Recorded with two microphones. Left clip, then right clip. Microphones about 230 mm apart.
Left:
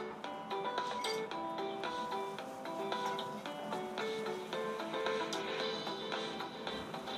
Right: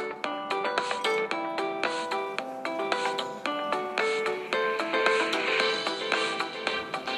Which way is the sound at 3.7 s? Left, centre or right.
Right.